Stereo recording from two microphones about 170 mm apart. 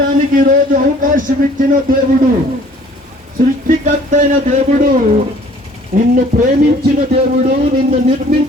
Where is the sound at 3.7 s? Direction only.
45° right (ahead or behind).